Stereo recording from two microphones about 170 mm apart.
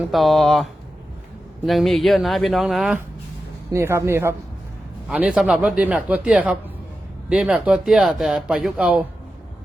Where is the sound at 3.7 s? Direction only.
15° right (ahead or behind).